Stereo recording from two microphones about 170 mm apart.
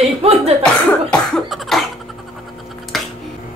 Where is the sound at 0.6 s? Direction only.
5° left (ahead or behind).